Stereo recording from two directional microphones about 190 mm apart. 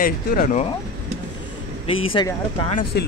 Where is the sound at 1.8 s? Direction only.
30° left (ahead or behind).